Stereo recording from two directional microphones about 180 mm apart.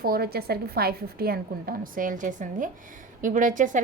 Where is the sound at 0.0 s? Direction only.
60° right (ahead or behind).